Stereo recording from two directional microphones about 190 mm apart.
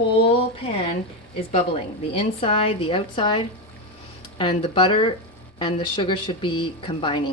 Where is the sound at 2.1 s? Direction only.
30° left (ahead or behind).